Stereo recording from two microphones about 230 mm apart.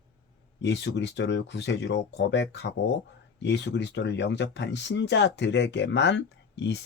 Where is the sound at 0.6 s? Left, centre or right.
Left.